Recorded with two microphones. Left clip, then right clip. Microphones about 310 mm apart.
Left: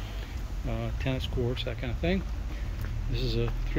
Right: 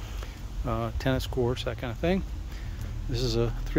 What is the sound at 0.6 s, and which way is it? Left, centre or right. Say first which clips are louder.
Speech: right 5 dB; centre.